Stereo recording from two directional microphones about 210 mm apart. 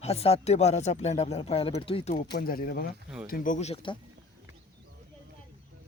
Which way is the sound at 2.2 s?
50° left (ahead or behind).